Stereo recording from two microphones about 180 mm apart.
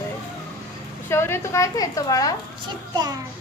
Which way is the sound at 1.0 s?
15° left (ahead or behind).